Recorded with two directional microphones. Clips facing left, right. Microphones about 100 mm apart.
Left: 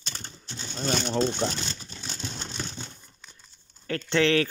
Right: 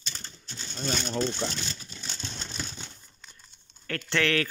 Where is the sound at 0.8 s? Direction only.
60° left (ahead or behind).